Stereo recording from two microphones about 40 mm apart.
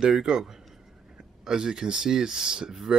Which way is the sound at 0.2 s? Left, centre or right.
Centre.